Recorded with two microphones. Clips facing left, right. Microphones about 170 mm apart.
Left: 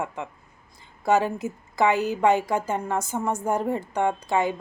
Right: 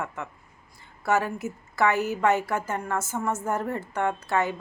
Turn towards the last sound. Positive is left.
turn(degrees=15)  # may be behind; listen again after turning